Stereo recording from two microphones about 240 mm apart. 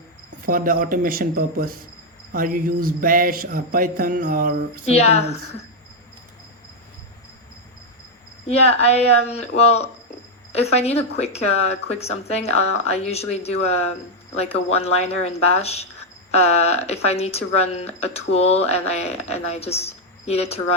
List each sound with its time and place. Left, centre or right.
0.4 s a sound: right
4.9 s speech: left
8.4 s speech: left